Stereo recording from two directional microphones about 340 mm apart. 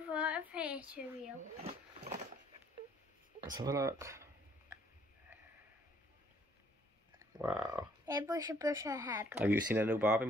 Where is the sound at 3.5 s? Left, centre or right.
Centre.